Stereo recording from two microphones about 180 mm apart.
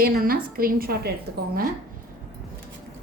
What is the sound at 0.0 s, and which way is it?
A woman's voice, 55° right (ahead or behind).